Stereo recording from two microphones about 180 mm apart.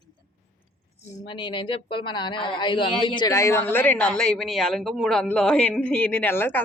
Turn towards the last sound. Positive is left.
turn(degrees=10)  # may be behind; listen again after turning